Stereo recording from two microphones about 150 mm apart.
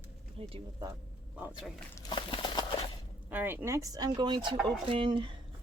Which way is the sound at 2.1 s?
35° left (ahead or behind).